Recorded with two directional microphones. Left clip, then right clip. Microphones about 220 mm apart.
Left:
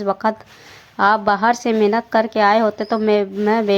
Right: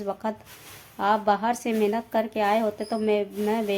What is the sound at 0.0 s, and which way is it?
A woman's voice, 15° left (ahead or behind).